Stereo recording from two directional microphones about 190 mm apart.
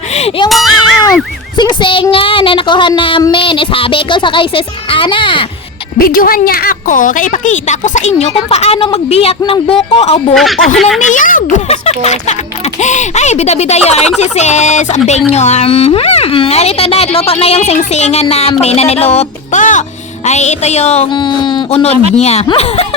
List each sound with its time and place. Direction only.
0.1 s music: 30° left (ahead or behind)
0.4 s music: centre (ahead or behind)
1.8 s child singing: 25° left (ahead or behind)
6.0 s a woman's voice: 50° left (ahead or behind); by 9.3 s 30° left (ahead or behind)
9.4 s child singing: 30° left (ahead or behind)
10.3 s speech: centre (ahead or behind)
11.0 s a woman's voice: 45° left (ahead or behind)